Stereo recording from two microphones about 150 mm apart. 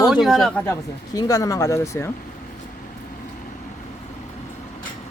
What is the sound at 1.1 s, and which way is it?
Speech, 25° left (ahead or behind).